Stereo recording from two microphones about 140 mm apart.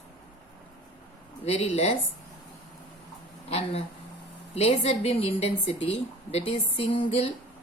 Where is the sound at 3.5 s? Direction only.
45° left (ahead or behind).